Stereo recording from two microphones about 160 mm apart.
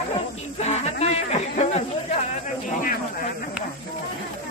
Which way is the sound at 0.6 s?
45° left (ahead or behind).